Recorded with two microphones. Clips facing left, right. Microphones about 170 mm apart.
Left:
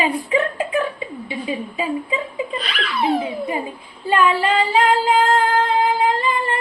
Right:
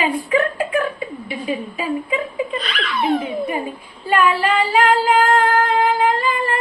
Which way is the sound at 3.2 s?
25° left (ahead or behind).